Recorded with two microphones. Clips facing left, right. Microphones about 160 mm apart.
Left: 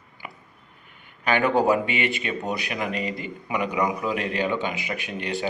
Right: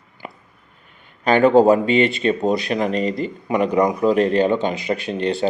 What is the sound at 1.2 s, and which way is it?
Speech, 30° right (ahead or behind).